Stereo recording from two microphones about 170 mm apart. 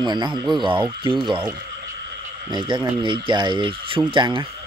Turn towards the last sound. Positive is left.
turn(degrees=-30)  # may be behind; listen again after turning